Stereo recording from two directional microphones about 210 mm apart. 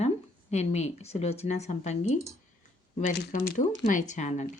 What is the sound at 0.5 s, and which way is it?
Speech, 30° left (ahead or behind).